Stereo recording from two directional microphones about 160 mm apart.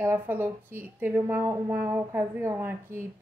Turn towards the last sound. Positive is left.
turn(degrees=-15)  # may be behind; listen again after turning